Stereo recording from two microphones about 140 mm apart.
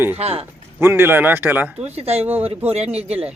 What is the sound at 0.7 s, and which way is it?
Speech, 15° right (ahead or behind).